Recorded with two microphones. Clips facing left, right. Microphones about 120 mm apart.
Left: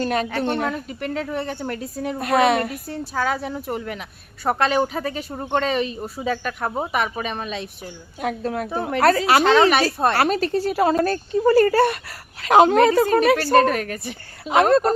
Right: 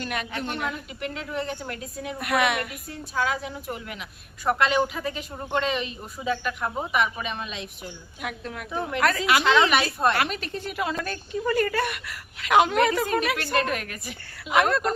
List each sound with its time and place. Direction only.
0.0 s a woman's voice: 35° left (ahead or behind)